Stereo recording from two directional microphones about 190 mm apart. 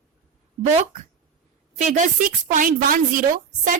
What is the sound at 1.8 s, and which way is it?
A woman's voice, 40° right (ahead or behind).